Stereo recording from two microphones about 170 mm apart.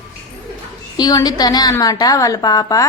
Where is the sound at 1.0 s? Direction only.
25° left (ahead or behind).